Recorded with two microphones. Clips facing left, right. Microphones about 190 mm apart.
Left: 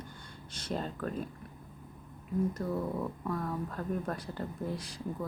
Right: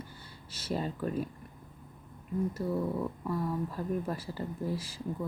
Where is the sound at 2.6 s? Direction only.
20° right (ahead or behind).